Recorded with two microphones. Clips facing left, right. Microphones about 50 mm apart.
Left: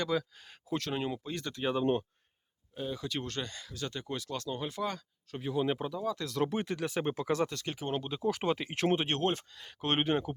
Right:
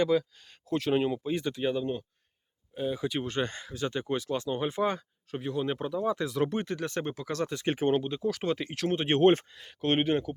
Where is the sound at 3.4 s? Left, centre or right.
Right.